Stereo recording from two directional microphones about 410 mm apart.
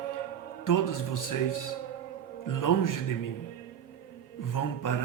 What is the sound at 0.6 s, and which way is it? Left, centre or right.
Speech, left.